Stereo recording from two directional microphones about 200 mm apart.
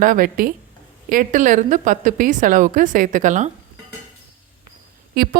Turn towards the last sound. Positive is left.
turn(degrees=-50)  # may be behind; listen again after turning